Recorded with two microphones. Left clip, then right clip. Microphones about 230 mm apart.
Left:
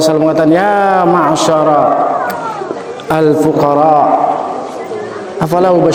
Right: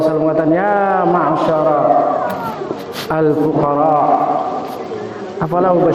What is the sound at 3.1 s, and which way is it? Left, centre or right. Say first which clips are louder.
Speech: left 4 dB; left.